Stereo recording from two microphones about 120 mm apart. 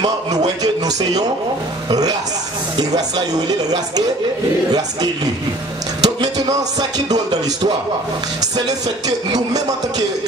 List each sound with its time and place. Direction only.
0.6 s speech: 35° right (ahead or behind)
6.0 s speech: 35° right (ahead or behind)